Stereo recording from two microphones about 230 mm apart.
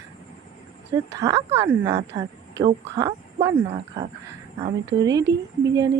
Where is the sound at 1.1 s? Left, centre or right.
Centre.